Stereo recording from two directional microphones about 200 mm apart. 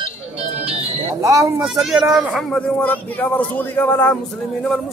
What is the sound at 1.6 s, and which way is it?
Speech, centre (ahead or behind).